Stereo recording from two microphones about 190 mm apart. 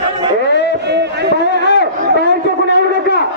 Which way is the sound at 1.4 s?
65° left (ahead or behind).